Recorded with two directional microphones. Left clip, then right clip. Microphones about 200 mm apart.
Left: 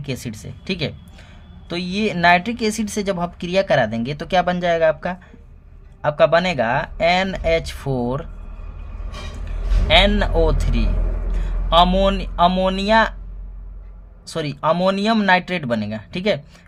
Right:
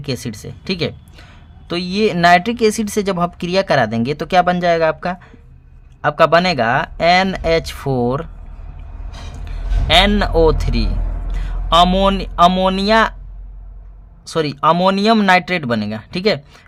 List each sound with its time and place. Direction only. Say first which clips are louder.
0.0 s speech: right 5 dB; 25° right (ahead or behind)
9.4 s a man's voice: even; 25° right (ahead or behind)
14.3 s speech: right 5 dB; 25° right (ahead or behind)